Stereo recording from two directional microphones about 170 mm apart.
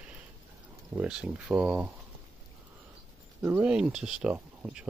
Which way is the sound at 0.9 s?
5° right (ahead or behind).